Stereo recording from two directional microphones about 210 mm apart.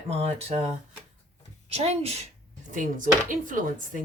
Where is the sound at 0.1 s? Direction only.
30° right (ahead or behind).